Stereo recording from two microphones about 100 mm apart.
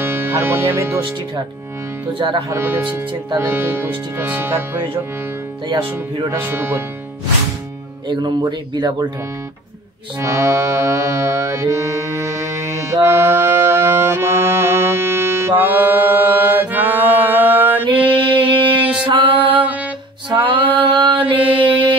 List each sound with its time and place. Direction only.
0.0 s speech: 25° right (ahead or behind)
2.1 s speech: 60° right (ahead or behind)
2.5 s speech: 20° right (ahead or behind)
5.7 s speech: 55° right (ahead or behind)
6.3 s speech: 20° right (ahead or behind)
8.1 s speech: 45° right (ahead or behind)
10.2 s mantra: 30° right (ahead or behind)
17.8 s music: 55° right (ahead or behind)
20.2 s mantra: 55° right (ahead or behind)
21.4 s music: 60° right (ahead or behind)